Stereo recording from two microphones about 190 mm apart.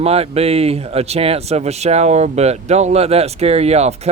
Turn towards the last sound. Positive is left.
turn(degrees=-35)  # may be behind; listen again after turning